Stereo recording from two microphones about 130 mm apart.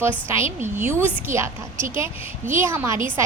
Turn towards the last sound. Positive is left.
turn(degrees=-20)  # may be behind; listen again after turning